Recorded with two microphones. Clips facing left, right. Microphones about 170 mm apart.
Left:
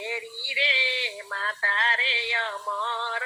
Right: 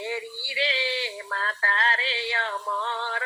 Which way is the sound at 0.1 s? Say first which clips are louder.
Right 3 dB; 35° right (ahead or behind).